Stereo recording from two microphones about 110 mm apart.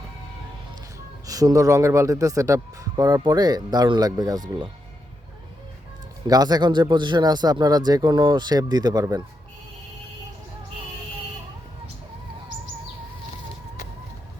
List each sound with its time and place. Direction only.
1.3 s a man's voice: 35° right (ahead or behind)
6.2 s a man's voice: 35° right (ahead or behind)